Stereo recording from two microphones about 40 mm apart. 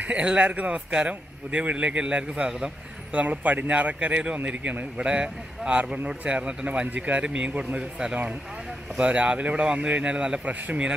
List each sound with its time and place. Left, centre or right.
0.0 s a man's voice: right
0.7 s a man's voice: right
3.1 s a man's voice: right
10.4 s a man's voice: right